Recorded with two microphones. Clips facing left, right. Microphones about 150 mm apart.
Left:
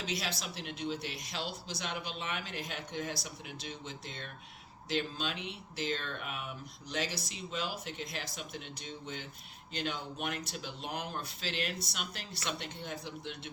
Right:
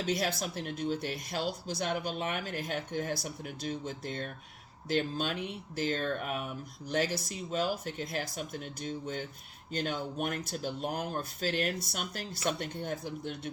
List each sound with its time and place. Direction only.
0.0 s speech: 50° right (ahead or behind)